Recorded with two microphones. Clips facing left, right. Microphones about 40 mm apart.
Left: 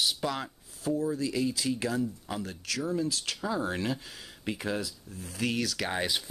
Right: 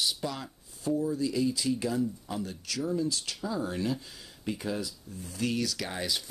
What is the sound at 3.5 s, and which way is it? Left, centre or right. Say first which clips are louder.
Speech: even; left.